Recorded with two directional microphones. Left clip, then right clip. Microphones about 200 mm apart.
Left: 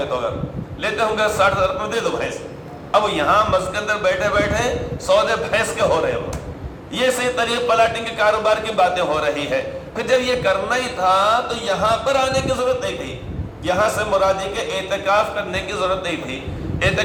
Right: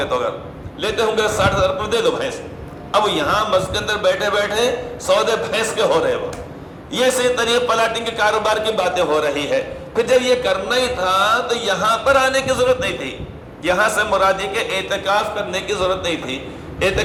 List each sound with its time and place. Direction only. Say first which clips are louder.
0.8 s a man's voice: right 1 dB; 40° right (ahead or behind)